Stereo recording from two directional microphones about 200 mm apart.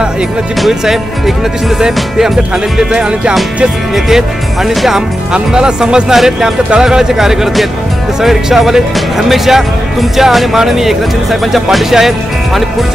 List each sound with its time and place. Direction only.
0.6 s speech: centre (ahead or behind)